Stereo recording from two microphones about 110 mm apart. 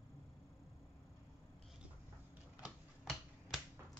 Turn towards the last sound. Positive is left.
turn(degrees=-5)  # may be behind; listen again after turning